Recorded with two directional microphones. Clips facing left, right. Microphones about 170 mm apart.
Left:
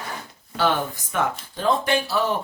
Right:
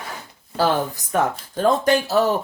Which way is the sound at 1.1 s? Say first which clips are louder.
Right 4 dB; 40° right (ahead or behind).